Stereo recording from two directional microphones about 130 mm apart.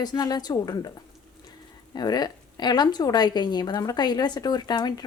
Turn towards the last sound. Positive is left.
turn(degrees=30)  # may be behind; listen again after turning